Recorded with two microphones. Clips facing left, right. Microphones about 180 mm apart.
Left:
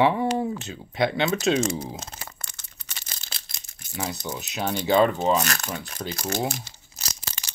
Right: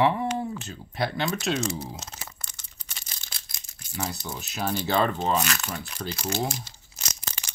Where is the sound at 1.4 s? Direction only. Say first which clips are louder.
Left 5 dB; 50° left (ahead or behind).